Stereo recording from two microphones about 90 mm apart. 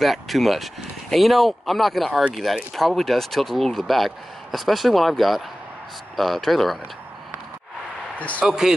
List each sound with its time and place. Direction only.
0.0 s speech: centre (ahead or behind)
8.2 s speech: 15° left (ahead or behind)
8.5 s speech: 5° right (ahead or behind)